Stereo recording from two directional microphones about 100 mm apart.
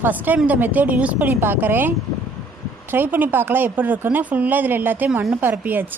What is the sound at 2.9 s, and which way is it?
Speech, 20° right (ahead or behind).